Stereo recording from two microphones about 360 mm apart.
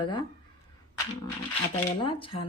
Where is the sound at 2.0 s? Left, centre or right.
Centre.